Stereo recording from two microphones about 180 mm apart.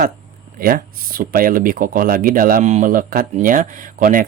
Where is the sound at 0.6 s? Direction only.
55° right (ahead or behind).